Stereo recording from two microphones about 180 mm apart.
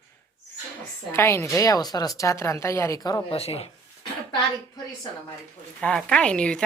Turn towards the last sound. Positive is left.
turn(degrees=5)  # may be behind; listen again after turning